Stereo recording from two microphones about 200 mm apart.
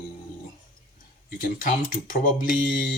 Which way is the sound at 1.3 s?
45° left (ahead or behind).